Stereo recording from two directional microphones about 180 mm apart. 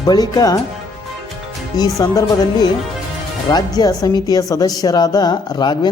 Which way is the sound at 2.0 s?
20° left (ahead or behind).